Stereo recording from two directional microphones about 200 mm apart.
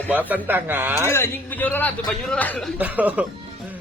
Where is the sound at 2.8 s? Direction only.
10° right (ahead or behind).